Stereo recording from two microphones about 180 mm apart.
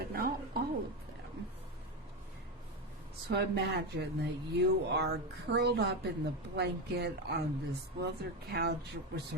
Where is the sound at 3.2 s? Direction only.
70° right (ahead or behind).